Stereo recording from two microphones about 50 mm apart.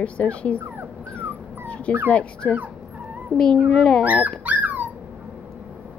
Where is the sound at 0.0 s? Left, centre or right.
Left.